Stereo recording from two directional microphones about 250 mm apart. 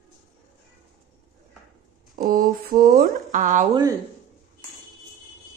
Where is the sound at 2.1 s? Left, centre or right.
Right.